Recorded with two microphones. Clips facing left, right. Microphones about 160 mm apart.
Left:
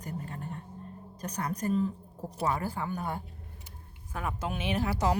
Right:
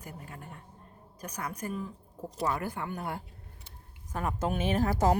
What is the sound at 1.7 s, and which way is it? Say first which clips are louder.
Speech: left 11 dB; 30° left (ahead or behind).